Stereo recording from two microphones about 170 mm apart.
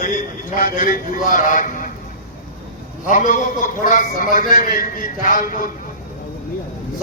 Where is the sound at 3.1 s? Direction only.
50° left (ahead or behind).